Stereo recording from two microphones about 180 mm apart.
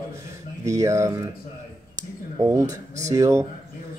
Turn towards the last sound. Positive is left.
turn(degrees=-15)  # may be behind; listen again after turning